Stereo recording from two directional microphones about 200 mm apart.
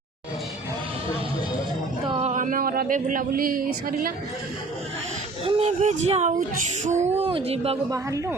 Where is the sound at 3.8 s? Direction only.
45° right (ahead or behind).